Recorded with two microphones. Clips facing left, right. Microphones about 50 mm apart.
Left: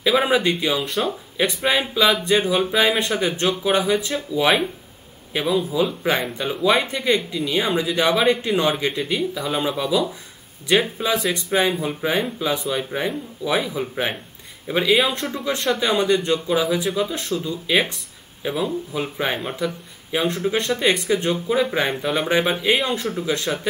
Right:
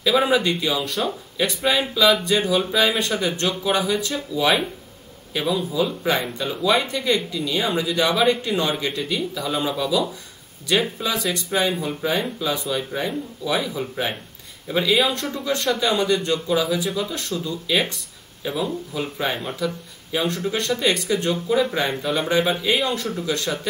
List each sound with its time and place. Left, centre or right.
0.0 s speech: left